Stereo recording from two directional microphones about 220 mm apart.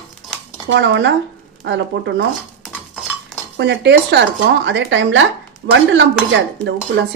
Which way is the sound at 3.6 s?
50° right (ahead or behind).